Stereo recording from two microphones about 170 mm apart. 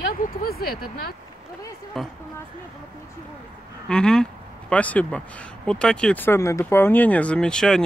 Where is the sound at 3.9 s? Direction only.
5° left (ahead or behind).